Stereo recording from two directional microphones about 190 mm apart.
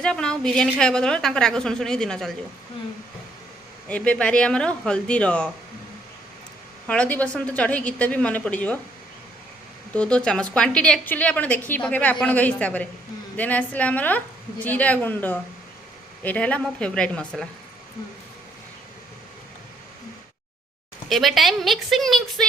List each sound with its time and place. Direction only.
0.0 s a woman's voice: 5° left (ahead or behind)
3.8 s a woman's voice: 5° left (ahead or behind)
6.8 s a woman's voice: 5° left (ahead or behind)
9.9 s a woman's voice: 5° left (ahead or behind)
21.1 s a woman's voice: centre (ahead or behind)